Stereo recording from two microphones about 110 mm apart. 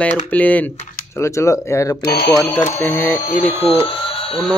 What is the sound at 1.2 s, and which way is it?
Speech, 25° left (ahead or behind).